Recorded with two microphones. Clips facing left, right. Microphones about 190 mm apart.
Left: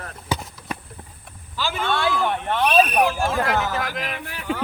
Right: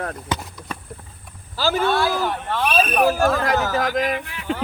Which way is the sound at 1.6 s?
40° right (ahead or behind).